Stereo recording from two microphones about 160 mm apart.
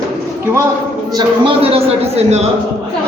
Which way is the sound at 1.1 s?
35° right (ahead or behind).